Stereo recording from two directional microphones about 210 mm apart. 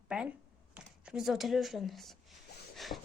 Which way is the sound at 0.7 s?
5° right (ahead or behind).